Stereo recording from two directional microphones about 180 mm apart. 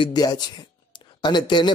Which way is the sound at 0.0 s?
20° left (ahead or behind).